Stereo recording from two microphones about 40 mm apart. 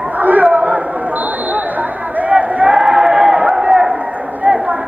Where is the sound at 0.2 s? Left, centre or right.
Right.